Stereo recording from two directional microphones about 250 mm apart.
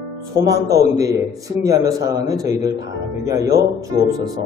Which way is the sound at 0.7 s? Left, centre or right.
Centre.